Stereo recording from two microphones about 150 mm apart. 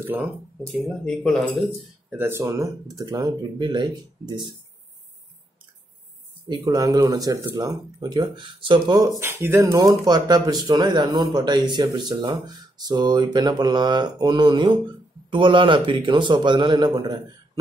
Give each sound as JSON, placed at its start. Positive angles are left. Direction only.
{"t": 0.8, "sound": "speech", "side_deg": 5}
{"t": 2.0, "sound": "speech", "side_deg": -15}
{"t": 6.4, "sound": "speech", "side_deg": -25}
{"t": 9.2, "sound": "a man's voice", "side_deg": -15}